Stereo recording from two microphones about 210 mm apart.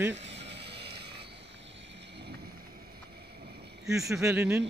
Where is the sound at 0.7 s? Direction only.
25° right (ahead or behind).